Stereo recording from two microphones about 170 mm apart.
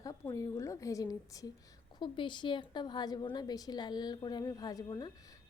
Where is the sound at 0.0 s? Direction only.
20° left (ahead or behind).